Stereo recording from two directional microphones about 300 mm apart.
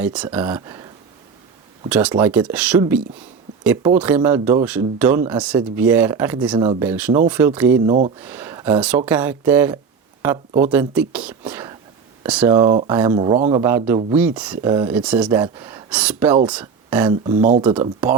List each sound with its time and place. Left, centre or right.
0.0 s speech: centre
1.9 s speech: centre
17.2 s speech: right
17.6 s speech: centre